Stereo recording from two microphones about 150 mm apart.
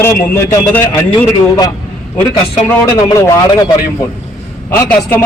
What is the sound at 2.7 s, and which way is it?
Speech, 20° left (ahead or behind).